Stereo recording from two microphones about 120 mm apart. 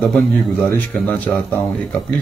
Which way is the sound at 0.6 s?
20° left (ahead or behind).